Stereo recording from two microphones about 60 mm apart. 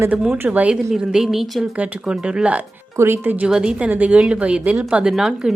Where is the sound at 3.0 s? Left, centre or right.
Right.